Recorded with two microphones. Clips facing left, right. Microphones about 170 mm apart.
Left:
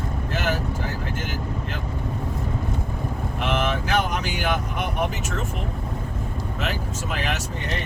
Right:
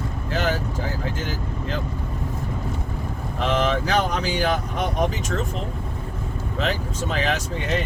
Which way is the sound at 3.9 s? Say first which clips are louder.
Right 2 dB; 35° right (ahead or behind).